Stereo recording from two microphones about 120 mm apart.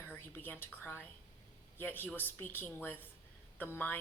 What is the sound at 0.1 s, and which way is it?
Speech, 15° left (ahead or behind).